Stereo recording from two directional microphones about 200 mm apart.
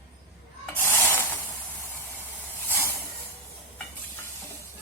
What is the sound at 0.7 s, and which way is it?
Spray, 10° left (ahead or behind).